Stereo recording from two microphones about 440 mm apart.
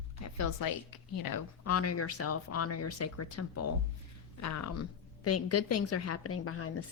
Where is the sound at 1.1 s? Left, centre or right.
Left.